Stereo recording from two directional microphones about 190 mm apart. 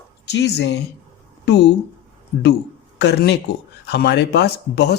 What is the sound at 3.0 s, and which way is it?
A man's voice, 60° left (ahead or behind).